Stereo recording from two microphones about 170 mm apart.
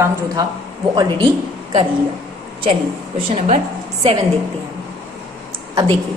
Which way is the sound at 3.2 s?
35° right (ahead or behind).